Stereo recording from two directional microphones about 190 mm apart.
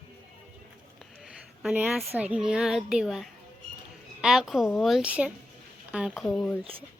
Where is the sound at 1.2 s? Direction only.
5° right (ahead or behind).